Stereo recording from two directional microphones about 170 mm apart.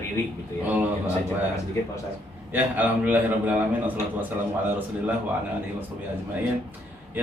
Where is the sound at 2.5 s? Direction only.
10° right (ahead or behind).